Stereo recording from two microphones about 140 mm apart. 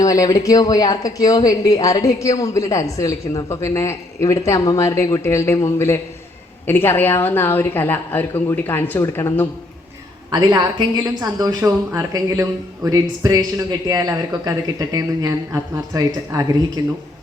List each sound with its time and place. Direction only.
0.0 s a woman's voice: 25° left (ahead or behind)
10.3 s a man's voice: 30° right (ahead or behind)